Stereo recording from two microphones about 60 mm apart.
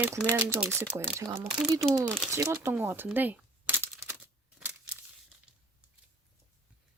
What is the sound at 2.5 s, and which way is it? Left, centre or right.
Speech, right.